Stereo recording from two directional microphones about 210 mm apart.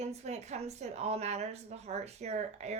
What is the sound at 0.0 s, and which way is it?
Speech, 30° right (ahead or behind).